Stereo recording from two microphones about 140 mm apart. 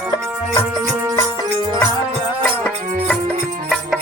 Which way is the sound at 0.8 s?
20° right (ahead or behind).